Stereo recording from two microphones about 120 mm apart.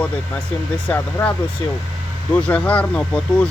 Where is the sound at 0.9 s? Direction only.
10° left (ahead or behind).